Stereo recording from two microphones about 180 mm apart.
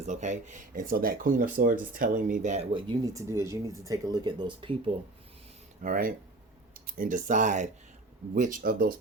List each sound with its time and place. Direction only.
0.0 s speech: 40° right (ahead or behind)
2.7 s speech: 25° right (ahead or behind)
5.8 s speech: 50° right (ahead or behind)